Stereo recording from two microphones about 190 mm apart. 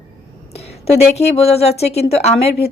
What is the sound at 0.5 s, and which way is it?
A woman's voice, 35° left (ahead or behind).